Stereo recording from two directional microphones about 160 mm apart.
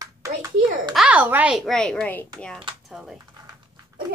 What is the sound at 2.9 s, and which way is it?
Speech, 5° right (ahead or behind).